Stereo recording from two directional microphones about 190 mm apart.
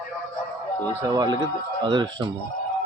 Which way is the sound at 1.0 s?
20° right (ahead or behind).